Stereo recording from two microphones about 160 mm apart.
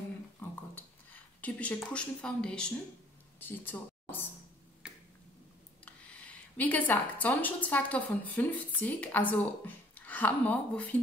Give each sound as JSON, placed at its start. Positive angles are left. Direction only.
{"t": 0.4, "sound": "a sound", "side_deg": 10}
{"t": 3.3, "sound": "speech", "side_deg": 15}
{"t": 4.8, "sound": "finger snapping", "side_deg": -5}
{"t": 5.9, "sound": "a woman's voice", "side_deg": 10}